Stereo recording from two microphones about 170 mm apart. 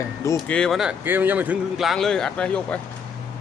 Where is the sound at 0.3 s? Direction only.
5° left (ahead or behind).